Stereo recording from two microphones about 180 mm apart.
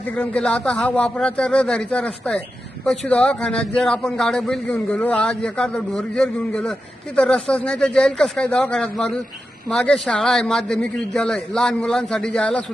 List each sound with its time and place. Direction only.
0.2 s a man's voice: 5° left (ahead or behind)